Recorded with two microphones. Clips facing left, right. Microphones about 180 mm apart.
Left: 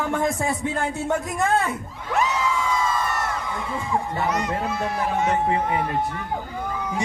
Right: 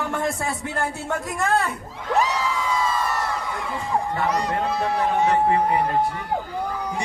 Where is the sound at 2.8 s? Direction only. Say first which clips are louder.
Right 1 dB; 30° right (ahead or behind).